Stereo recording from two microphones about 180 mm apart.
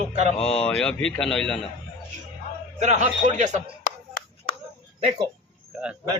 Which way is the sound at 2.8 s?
40° right (ahead or behind).